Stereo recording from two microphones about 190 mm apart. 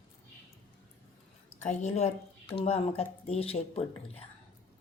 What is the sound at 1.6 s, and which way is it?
Speech, 35° left (ahead or behind).